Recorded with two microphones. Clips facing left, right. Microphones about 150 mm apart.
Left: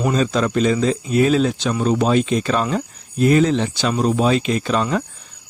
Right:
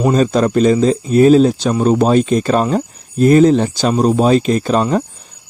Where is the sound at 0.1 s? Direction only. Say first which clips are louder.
Right 5 dB; 45° right (ahead or behind).